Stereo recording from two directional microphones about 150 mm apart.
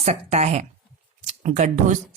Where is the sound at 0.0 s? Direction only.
45° right (ahead or behind).